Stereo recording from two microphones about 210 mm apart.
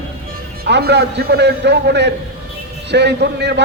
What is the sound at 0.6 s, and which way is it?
A man's voice, 50° right (ahead or behind).